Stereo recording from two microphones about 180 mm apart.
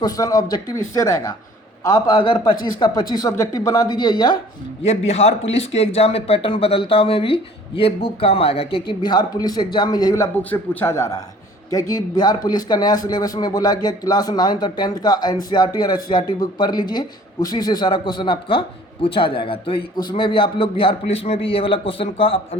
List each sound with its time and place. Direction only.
0.0 s a man's voice: 20° left (ahead or behind)
4.9 s a man's voice: 35° left (ahead or behind)
10.5 s a man's voice: 10° left (ahead or behind); by 22.4 s 30° left (ahead or behind)